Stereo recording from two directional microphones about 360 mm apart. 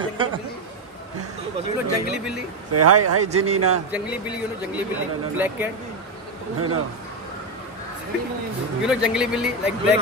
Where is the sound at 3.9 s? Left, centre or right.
Centre.